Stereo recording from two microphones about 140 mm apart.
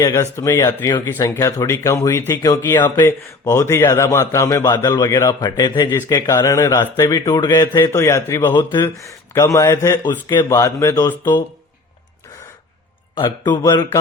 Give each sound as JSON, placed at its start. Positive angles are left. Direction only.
{"t": 0.1, "sound": "a man's voice", "side_deg": 20}
{"t": 7.8, "sound": "a man's voice", "side_deg": 20}
{"t": 13.1, "sound": "a man's voice", "side_deg": 30}